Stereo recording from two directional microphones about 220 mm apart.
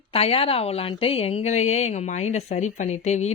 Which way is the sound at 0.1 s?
25° left (ahead or behind).